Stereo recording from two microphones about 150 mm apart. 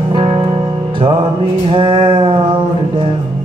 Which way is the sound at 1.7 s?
35° right (ahead or behind).